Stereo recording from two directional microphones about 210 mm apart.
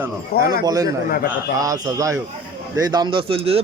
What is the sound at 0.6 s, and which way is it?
A man's voice, 15° right (ahead or behind).